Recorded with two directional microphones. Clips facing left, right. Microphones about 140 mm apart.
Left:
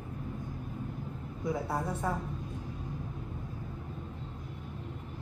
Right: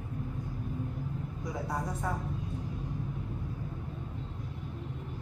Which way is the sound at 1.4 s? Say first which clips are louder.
Left 4 dB; 25° left (ahead or behind).